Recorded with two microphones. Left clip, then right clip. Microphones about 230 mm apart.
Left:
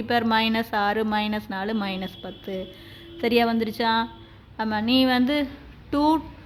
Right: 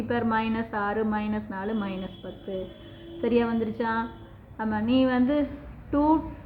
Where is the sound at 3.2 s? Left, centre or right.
Left.